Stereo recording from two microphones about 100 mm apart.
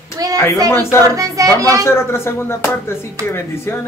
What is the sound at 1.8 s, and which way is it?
Speech, 25° left (ahead or behind).